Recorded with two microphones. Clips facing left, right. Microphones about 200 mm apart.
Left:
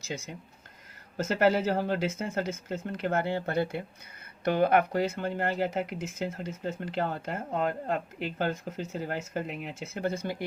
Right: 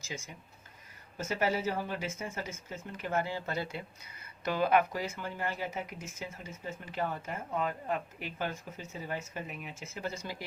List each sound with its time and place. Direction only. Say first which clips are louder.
0.0 s speech: left 6 dB; 65° left (ahead or behind)